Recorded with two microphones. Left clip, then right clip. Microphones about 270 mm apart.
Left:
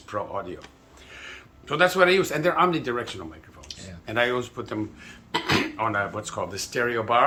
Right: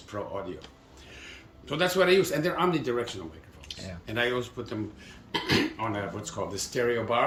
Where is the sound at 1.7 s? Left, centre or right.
Centre.